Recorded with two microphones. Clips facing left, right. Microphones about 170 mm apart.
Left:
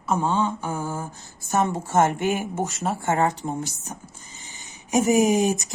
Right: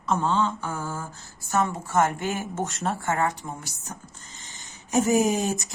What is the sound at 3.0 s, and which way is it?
Speech, 25° left (ahead or behind).